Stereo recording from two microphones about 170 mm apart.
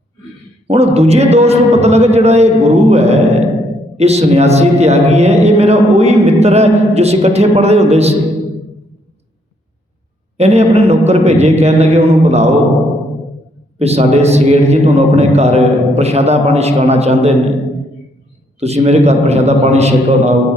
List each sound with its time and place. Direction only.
0.7 s a man's voice: 35° right (ahead or behind)
10.3 s a man's voice: 40° right (ahead or behind)
13.7 s a man's voice: 40° right (ahead or behind)
18.6 s a man's voice: 40° right (ahead or behind)